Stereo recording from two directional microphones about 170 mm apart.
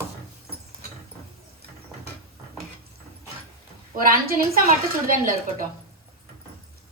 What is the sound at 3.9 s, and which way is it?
A woman's voice, 60° right (ahead or behind).